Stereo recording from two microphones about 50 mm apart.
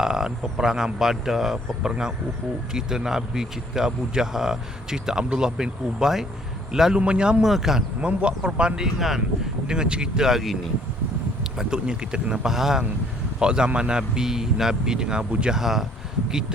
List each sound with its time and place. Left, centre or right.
0.0 s speech: centre
6.9 s speech: right
7.4 s speech: centre
8.0 s speech: right
9.0 s speech: centre
9.6 s speech: centre
11.5 s speech: centre
12.5 s speech: centre
15.5 s speech: centre